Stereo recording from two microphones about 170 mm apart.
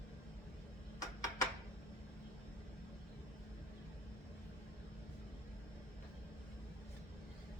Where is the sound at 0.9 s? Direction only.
20° left (ahead or behind).